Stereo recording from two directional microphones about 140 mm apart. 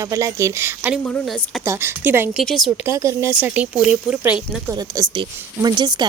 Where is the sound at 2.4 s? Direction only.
Centre (ahead or behind).